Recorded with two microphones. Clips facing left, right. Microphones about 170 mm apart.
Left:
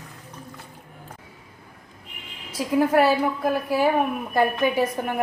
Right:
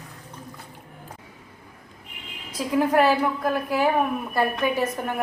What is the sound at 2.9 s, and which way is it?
Speech, 10° left (ahead or behind).